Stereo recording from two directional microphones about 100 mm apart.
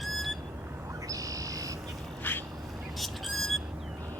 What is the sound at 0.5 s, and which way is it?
Bird, 25° right (ahead or behind).